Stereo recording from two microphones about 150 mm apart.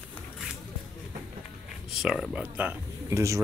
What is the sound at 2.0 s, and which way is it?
Speech, 5° right (ahead or behind).